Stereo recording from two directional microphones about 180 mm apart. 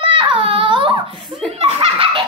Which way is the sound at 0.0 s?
25° right (ahead or behind).